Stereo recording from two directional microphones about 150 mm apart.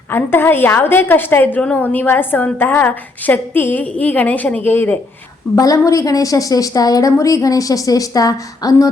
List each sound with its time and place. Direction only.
0.1 s a woman's voice: 15° left (ahead or behind)
5.5 s a woman's voice: 25° left (ahead or behind)